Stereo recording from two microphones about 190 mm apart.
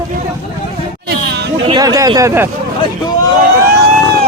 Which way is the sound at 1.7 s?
20° right (ahead or behind).